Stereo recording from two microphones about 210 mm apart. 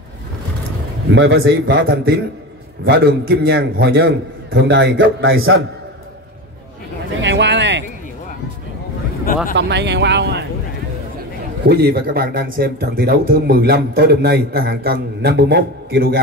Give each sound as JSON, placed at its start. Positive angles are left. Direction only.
{"t": 1.1, "sound": "a man's voice", "side_deg": -65}
{"t": 1.7, "sound": "a man's voice", "side_deg": -50}
{"t": 7.2, "sound": "a sound", "side_deg": -60}
{"t": 9.6, "sound": "a man's voice", "side_deg": -55}
{"t": 11.6, "sound": "speech", "side_deg": -50}